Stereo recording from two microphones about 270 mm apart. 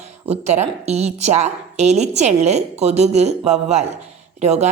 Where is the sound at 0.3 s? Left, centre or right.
Right.